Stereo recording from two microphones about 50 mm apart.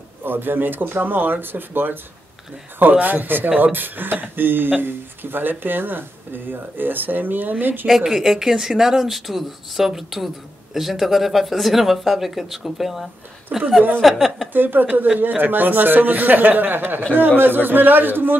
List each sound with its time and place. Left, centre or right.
0.2 s speech: right
7.9 s speech: centre
13.5 s a woman's voice: right
14.0 s speech: centre
14.5 s speech: right